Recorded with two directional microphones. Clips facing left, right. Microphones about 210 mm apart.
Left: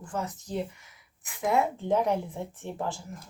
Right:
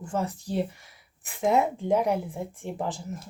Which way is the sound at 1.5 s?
15° right (ahead or behind).